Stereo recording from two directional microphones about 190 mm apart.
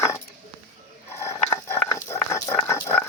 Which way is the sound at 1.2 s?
15° left (ahead or behind).